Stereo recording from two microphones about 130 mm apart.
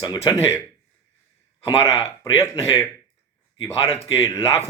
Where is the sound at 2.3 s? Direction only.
20° left (ahead or behind).